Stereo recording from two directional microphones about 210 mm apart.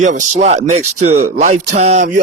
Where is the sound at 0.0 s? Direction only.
35° right (ahead or behind).